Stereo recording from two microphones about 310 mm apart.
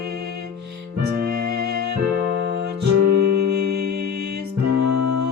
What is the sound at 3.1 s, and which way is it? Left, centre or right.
Music, right.